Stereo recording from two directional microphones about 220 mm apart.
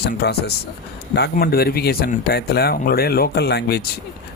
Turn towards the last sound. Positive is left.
turn(degrees=50)  # may be behind; listen again after turning